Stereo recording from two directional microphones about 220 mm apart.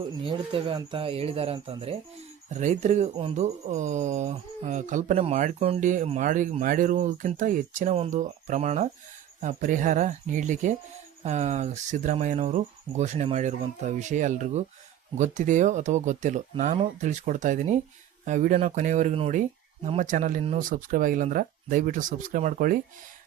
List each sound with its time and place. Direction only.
0.2 s speech: 25° right (ahead or behind)